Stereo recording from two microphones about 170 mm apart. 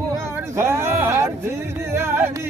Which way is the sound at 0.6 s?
15° right (ahead or behind).